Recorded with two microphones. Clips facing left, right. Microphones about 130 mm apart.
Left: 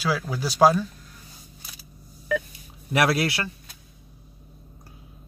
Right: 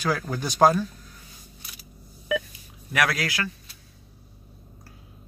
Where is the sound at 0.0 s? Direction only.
5° left (ahead or behind).